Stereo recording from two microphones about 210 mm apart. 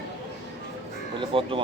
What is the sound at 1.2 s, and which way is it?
Speech, 25° right (ahead or behind).